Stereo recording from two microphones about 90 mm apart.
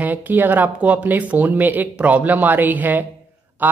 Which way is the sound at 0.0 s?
20° right (ahead or behind).